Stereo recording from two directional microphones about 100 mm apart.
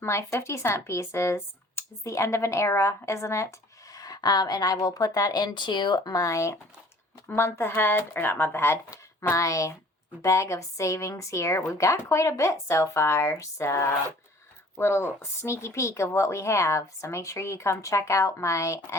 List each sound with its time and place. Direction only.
0.0 s speech: 25° left (ahead or behind)
3.9 s a woman's voice: 40° left (ahead or behind)